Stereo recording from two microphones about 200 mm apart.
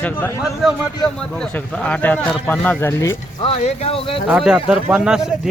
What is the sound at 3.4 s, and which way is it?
Speech, 30° left (ahead or behind).